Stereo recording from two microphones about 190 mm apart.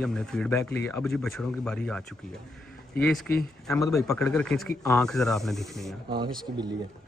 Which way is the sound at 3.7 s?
15° left (ahead or behind).